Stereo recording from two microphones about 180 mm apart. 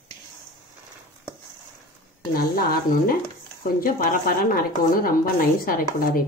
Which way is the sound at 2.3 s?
55° left (ahead or behind).